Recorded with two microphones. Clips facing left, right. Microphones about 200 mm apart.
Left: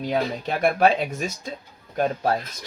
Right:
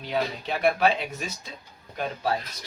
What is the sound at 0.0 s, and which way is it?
Speech, 45° left (ahead or behind).